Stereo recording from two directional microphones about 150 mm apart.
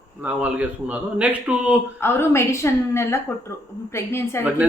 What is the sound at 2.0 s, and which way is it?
A woman's voice, 15° left (ahead or behind).